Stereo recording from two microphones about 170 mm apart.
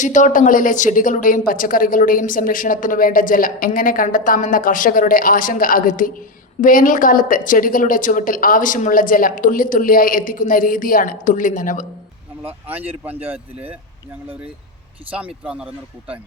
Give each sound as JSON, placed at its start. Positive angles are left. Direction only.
{"t": 0.0, "sound": "a woman's voice", "side_deg": 45}
{"t": 12.4, "sound": "speech", "side_deg": -10}
{"t": 15.1, "sound": "speech", "side_deg": -10}